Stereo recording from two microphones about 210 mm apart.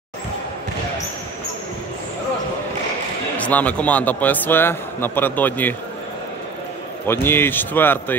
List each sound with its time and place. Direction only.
3.3 s a man's voice: 5° left (ahead or behind)
7.1 s a man's voice: 10° left (ahead or behind)